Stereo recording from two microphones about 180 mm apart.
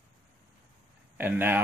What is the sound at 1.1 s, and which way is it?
Speech, 10° right (ahead or behind).